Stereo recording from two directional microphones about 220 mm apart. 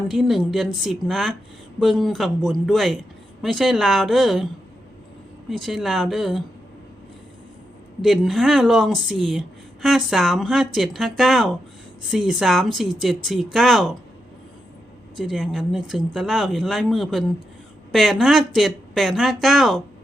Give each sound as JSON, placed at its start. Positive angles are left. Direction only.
{"t": 0.1, "sound": "speech", "side_deg": 0}
{"t": 5.5, "sound": "speech", "side_deg": 0}
{"t": 8.0, "sound": "speech", "side_deg": 0}
{"t": 15.1, "sound": "speech", "side_deg": 0}